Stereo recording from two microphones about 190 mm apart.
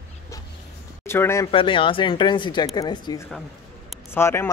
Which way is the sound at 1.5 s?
25° left (ahead or behind).